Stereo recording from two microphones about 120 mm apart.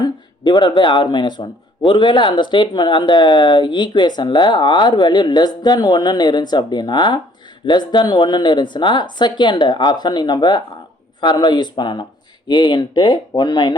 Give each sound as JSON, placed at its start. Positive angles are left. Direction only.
{"t": 0.0, "sound": "speech", "side_deg": 40}